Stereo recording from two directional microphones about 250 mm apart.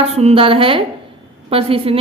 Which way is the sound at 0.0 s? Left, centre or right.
Right.